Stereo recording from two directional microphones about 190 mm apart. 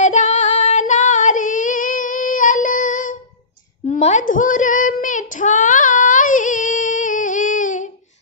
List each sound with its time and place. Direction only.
0.0 s female singing: 40° left (ahead or behind)
3.8 s child singing: 35° left (ahead or behind)